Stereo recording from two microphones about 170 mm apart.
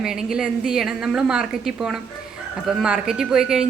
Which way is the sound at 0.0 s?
5° right (ahead or behind).